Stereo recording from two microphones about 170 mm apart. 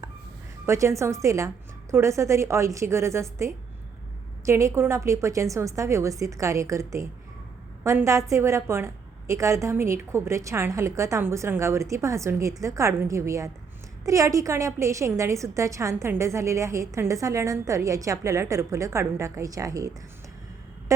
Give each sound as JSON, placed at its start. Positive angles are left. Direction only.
{"t": 0.6, "sound": "a woman's voice", "side_deg": -15}